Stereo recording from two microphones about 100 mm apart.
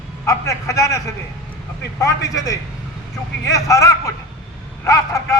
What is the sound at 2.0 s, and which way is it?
A man's voice, 35° left (ahead or behind).